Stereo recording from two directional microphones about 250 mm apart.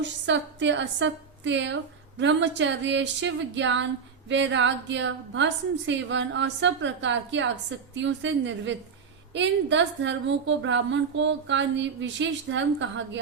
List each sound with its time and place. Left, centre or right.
0.0 s a woman's voice: right